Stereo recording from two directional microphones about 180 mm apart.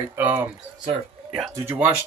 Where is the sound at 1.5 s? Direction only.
10° right (ahead or behind).